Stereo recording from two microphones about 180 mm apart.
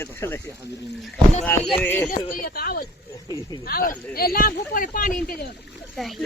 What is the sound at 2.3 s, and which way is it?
Speech, 55° left (ahead or behind).